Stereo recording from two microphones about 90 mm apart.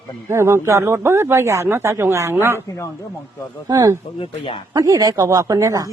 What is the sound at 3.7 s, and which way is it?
Speech, 35° right (ahead or behind).